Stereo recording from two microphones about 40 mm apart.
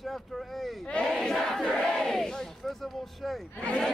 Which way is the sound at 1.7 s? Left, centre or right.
Centre.